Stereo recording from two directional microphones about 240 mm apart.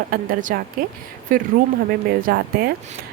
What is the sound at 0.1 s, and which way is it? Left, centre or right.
Speech, right.